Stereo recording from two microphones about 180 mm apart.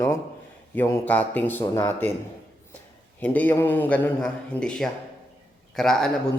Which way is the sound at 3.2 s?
10° left (ahead or behind).